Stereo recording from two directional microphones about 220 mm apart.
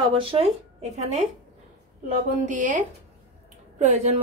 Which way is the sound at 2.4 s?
35° right (ahead or behind).